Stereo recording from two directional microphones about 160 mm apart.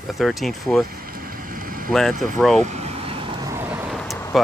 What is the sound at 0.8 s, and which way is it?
Vehicle, 65° right (ahead or behind).